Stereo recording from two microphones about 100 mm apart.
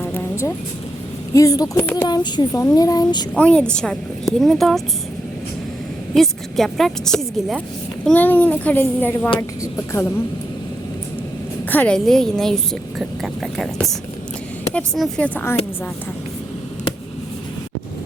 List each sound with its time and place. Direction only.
1.3 s speech: 35° left (ahead or behind)
2.0 s speech: 45° left (ahead or behind)
3.3 s a child's voice: 10° left (ahead or behind)
6.1 s a woman's voice: centre (ahead or behind)
8.1 s a child's voice: 15° left (ahead or behind)
11.7 s a woman's voice: 15° left (ahead or behind)
11.9 s a woman's voice: 5° left (ahead or behind)
14.9 s a woman's voice: centre (ahead or behind)
15.2 s a child's voice: 15° left (ahead or behind)